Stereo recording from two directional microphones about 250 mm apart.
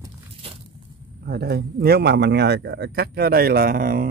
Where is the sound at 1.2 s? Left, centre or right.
Right.